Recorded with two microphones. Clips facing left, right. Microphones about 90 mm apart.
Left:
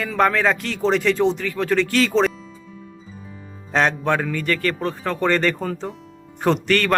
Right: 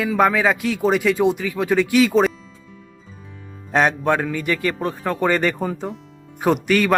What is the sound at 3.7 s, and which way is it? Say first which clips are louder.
Speech: right 2 dB; 10° right (ahead or behind).